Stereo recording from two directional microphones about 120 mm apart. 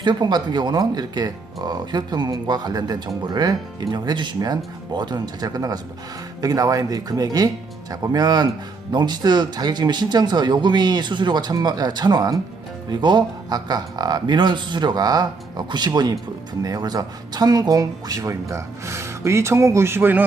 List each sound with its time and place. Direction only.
0.0 s a man's voice: 35° right (ahead or behind); by 20.2 s 15° right (ahead or behind)